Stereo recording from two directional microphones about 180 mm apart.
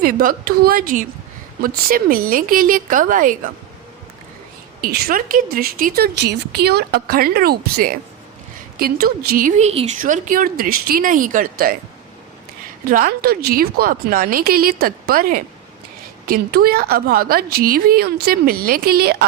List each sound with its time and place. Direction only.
0.0 s speech: 55° right (ahead or behind)
4.8 s speech: 60° right (ahead or behind)
9.6 s speech: 40° right (ahead or behind)
12.9 s speech: 55° right (ahead or behind)